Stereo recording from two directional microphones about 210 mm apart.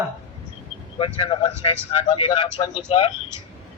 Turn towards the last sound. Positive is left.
turn(degrees=30)  # may be behind; listen again after turning